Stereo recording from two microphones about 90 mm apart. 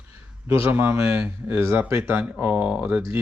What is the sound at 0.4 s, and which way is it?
Speech, 25° right (ahead or behind).